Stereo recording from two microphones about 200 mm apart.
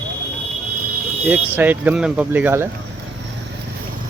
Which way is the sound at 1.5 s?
10° right (ahead or behind).